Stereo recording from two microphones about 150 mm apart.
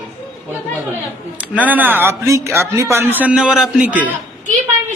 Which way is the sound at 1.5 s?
10° right (ahead or behind).